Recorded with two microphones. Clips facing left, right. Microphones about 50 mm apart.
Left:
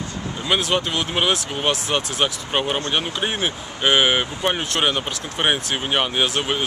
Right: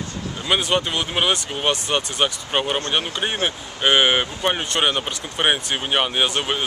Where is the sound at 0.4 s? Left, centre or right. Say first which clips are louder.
Even; centre.